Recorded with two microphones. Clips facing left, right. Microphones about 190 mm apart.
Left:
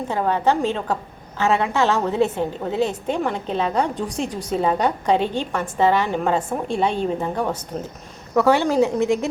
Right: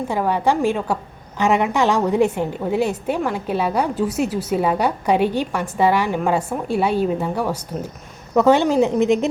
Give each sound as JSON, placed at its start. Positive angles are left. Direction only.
{"t": 0.1, "sound": "a woman's voice", "side_deg": -10}
{"t": 8.4, "sound": "a woman's voice", "side_deg": -20}